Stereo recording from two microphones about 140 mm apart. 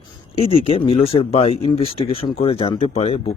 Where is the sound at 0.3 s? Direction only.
45° left (ahead or behind).